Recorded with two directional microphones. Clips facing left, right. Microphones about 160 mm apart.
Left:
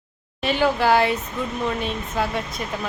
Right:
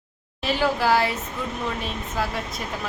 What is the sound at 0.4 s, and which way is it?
Speech, 5° right (ahead or behind).